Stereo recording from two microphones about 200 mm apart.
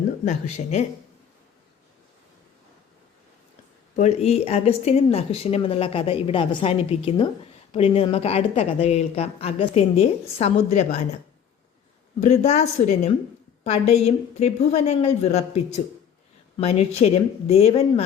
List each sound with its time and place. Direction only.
0.3 s a woman's voice: 35° left (ahead or behind)
3.9 s a woman's voice: 35° left (ahead or behind)
12.2 s a woman's voice: 35° left (ahead or behind)